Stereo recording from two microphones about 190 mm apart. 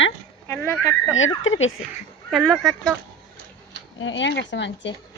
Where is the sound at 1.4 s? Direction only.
90° left.